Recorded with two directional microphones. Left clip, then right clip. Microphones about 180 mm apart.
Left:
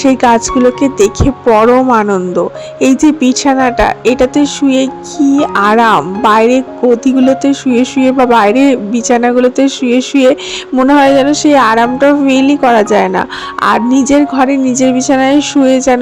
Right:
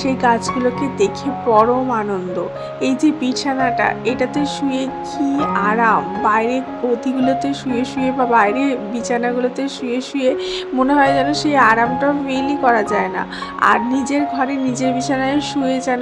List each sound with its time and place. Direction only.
0.0 s speech: 45° left (ahead or behind)